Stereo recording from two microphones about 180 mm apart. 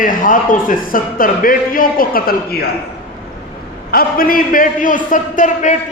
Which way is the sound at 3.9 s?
55° left (ahead or behind).